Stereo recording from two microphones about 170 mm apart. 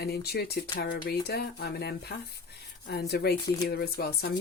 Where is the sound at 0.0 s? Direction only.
70° left (ahead or behind).